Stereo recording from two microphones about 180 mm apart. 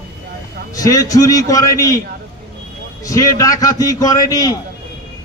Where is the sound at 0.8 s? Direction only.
20° left (ahead or behind).